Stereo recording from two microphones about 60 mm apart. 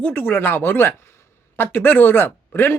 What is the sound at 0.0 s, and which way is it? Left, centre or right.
A man's voice, left.